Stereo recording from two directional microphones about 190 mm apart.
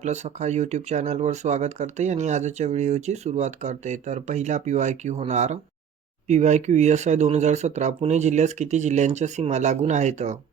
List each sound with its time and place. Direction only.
0.0 s speech: 35° right (ahead or behind)